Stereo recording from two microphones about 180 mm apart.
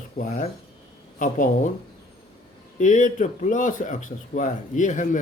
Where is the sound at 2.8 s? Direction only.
45° left (ahead or behind).